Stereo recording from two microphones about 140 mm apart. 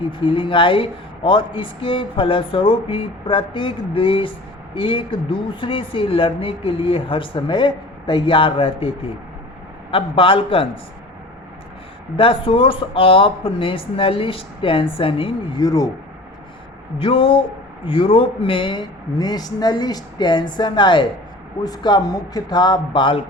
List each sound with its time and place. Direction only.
0.2 s a woman's voice: 35° left (ahead or behind)
9.9 s a woman's voice: 40° left (ahead or behind)
12.1 s a woman's voice: 40° left (ahead or behind)
15.6 s a man's voice: 25° left (ahead or behind)
17.0 s a woman's voice: 40° left (ahead or behind)